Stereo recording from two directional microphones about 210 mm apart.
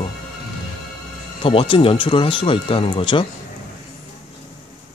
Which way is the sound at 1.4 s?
25° left (ahead or behind).